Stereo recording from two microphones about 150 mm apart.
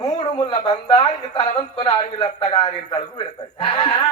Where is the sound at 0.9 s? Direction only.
35° left (ahead or behind).